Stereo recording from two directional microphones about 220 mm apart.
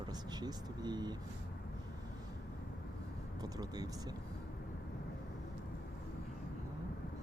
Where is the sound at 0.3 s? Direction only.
20° right (ahead or behind).